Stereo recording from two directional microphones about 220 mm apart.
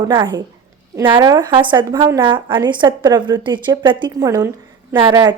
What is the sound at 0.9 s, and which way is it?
A woman's voice, 20° right (ahead or behind).